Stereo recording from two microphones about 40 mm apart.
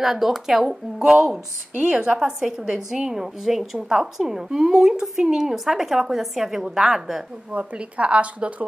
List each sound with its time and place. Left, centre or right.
0.0 s a woman's voice: centre
1.8 s a woman's voice: right
2.1 s a woman's voice: centre
7.5 s speech: right